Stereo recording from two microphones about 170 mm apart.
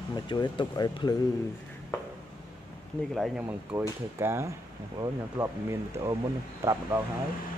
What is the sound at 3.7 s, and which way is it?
Speech, 15° right (ahead or behind).